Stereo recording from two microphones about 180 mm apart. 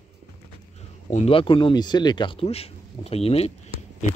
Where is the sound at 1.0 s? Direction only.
35° left (ahead or behind).